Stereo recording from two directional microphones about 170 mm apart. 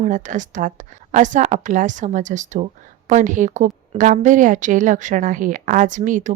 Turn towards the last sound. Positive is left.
turn(degrees=-50)  # may be behind; listen again after turning